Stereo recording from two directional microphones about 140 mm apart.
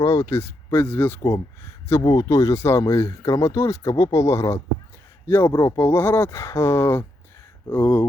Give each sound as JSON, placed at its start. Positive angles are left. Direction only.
{"t": 0.0, "sound": "speech", "side_deg": 20}